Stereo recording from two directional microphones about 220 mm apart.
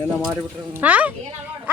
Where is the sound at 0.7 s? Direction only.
5° right (ahead or behind).